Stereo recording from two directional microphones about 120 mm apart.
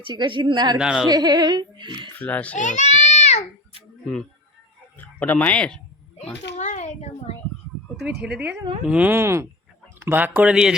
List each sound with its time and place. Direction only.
0.0 s speech: 45° right (ahead or behind)
0.8 s speech: 5° right (ahead or behind)
1.0 s speech: 35° right (ahead or behind)
2.1 s a child's voice: 15° left (ahead or behind)
2.6 s a child's voice: 85° left; by 3.8 s 60° left (ahead or behind)
4.9 s speech: 15° left (ahead or behind)
6.6 s a child's voice: 75° left (ahead or behind)
7.9 s speech: 5° right (ahead or behind)